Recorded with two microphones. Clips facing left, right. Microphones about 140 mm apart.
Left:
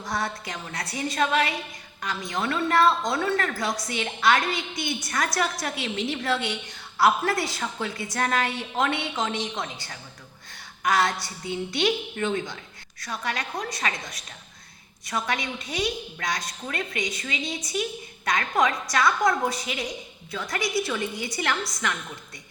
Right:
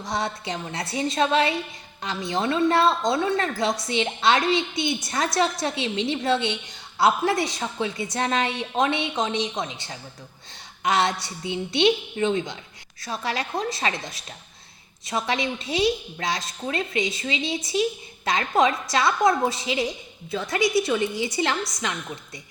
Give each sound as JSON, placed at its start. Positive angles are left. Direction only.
{"t": 0.0, "sound": "a woman's voice", "side_deg": -25}